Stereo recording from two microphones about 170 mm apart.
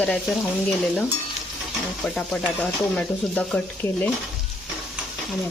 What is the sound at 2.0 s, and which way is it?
Speech, 5° left (ahead or behind).